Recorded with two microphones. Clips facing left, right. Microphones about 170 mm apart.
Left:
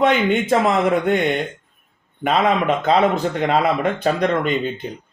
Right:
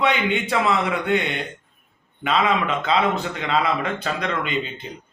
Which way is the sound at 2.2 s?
45° left (ahead or behind).